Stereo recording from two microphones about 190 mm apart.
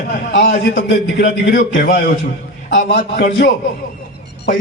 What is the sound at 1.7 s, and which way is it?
A man's voice, 60° left (ahead or behind).